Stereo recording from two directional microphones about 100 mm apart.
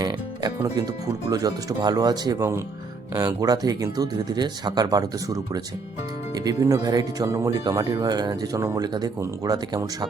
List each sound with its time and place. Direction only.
0.0 s music: 45° right (ahead or behind)
1.3 s speech: 40° right (ahead or behind)